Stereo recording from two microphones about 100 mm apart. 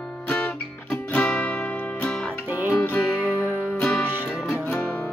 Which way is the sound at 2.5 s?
15° right (ahead or behind).